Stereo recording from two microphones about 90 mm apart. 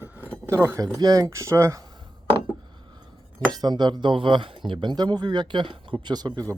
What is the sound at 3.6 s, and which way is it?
Speech, 50° right (ahead or behind).